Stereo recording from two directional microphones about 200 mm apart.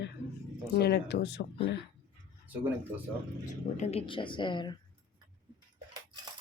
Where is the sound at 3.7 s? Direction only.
30° left (ahead or behind).